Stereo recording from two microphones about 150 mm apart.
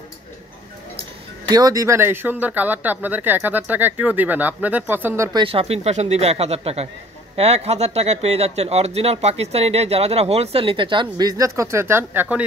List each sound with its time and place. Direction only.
1.5 s speech: 25° right (ahead or behind)
5.4 s speech: 40° right (ahead or behind); by 12.4 s 10° right (ahead or behind)